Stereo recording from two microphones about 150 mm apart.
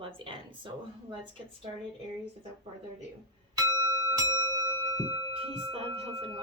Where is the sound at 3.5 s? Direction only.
25° right (ahead or behind).